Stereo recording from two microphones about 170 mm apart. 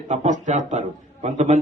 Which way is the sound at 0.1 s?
45° right (ahead or behind).